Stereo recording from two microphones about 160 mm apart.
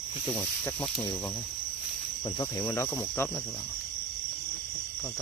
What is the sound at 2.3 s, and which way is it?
Speech, 20° left (ahead or behind).